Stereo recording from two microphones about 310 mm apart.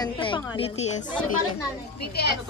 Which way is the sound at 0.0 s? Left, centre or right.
Centre.